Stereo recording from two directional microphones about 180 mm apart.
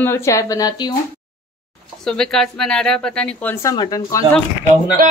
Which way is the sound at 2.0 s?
5° left (ahead or behind).